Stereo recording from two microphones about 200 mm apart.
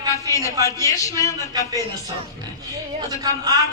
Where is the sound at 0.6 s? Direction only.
15° left (ahead or behind).